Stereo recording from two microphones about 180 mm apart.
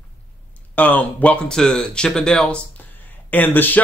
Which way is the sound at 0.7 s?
10° left (ahead or behind).